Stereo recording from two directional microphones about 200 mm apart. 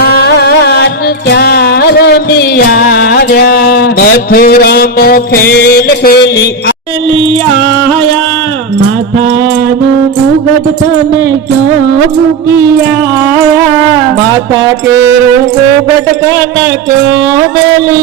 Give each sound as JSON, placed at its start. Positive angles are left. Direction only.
{"t": 0.0, "sound": "music", "side_deg": 55}